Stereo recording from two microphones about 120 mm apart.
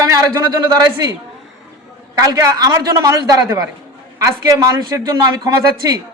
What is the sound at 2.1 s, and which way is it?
A man's voice, 30° right (ahead or behind).